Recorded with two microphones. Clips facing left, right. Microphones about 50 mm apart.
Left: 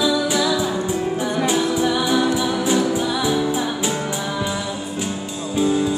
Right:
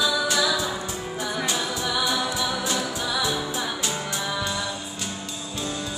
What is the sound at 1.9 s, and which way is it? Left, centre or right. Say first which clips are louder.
Music: left 7 dB; left.